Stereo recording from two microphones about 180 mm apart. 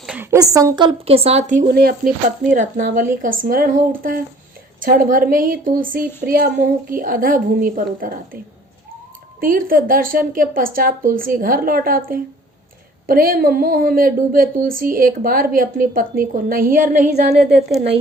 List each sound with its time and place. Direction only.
0.0 s a sound: 5° right (ahead or behind)
0.3 s a woman's voice: 20° right (ahead or behind); by 2.0 s 55° right (ahead or behind)
2.5 s speech: 45° right (ahead or behind)
9.4 s speech: 50° right (ahead or behind)